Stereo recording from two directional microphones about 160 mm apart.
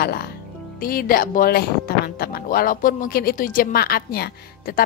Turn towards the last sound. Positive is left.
turn(degrees=75)  # may be behind; listen again after turning